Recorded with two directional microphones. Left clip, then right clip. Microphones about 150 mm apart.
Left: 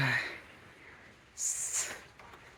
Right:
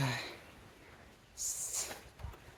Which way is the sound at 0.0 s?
10° right (ahead or behind).